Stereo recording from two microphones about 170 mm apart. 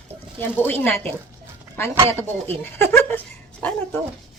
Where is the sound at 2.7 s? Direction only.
15° left (ahead or behind).